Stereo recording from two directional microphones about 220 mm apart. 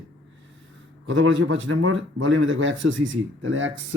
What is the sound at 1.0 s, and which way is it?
Speech, 60° right (ahead or behind).